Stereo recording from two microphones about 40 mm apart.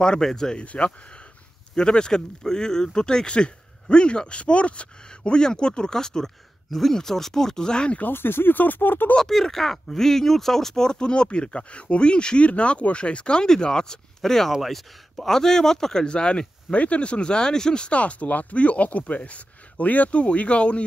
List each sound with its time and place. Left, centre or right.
0.2 s speech: centre
0.6 s speech: left
1.8 s speech: left
8.1 s speech: left
9.2 s speech: centre; by 20.8 s left